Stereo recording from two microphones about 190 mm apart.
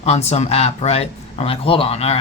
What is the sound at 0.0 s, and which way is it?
Speech, 35° left (ahead or behind).